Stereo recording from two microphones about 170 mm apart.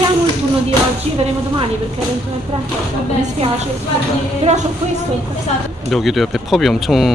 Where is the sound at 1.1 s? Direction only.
35° right (ahead or behind).